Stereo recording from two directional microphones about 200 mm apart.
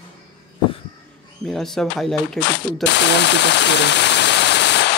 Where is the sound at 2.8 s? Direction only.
60° left (ahead or behind).